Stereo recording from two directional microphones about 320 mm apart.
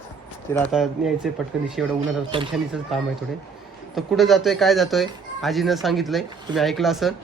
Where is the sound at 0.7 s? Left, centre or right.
Centre.